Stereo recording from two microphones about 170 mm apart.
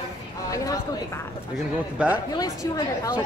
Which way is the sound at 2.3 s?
20° left (ahead or behind).